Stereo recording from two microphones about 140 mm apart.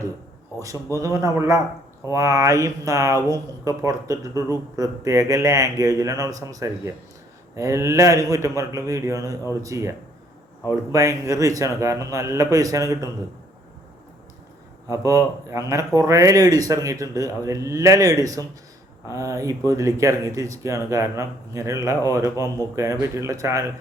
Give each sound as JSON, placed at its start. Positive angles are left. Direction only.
{"t": 0.6, "sound": "speech", "side_deg": -25}
{"t": 14.8, "sound": "speech", "side_deg": -25}